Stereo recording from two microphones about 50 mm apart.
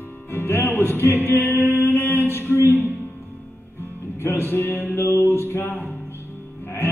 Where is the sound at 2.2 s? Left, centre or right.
Left.